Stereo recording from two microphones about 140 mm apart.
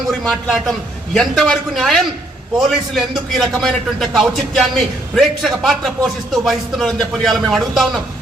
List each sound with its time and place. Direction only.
0.1 s a man's voice: 5° left (ahead or behind)